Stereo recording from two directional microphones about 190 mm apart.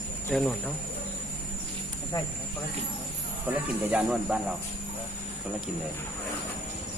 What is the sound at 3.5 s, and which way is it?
Speech, 5° right (ahead or behind).